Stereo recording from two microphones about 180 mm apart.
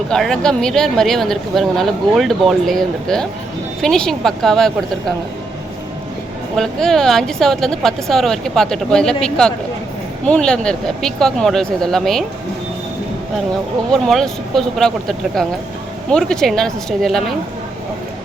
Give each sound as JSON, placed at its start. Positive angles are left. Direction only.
{"t": 0.1, "sound": "speech", "side_deg": 5}
{"t": 6.6, "sound": "speech", "side_deg": 0}
{"t": 13.9, "sound": "speech", "side_deg": 0}